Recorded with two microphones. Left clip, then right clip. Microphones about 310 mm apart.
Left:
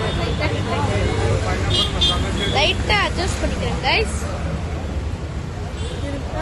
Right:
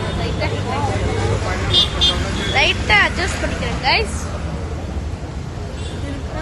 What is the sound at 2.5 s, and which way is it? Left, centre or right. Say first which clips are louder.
Speech: right 5 dB; centre.